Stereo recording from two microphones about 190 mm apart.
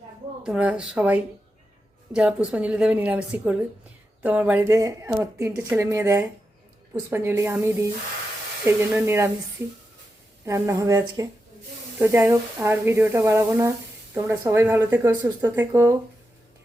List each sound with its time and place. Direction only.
0.4 s speech: 5° right (ahead or behind)
10.4 s speech: 15° right (ahead or behind)